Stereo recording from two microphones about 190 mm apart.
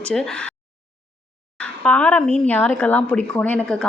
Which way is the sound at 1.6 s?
5° left (ahead or behind).